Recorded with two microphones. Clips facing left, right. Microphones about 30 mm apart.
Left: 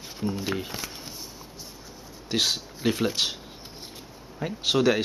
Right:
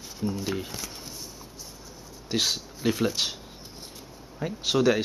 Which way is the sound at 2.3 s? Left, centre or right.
Centre.